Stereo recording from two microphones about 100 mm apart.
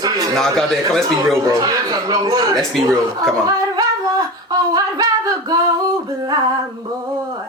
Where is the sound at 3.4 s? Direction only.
40° right (ahead or behind).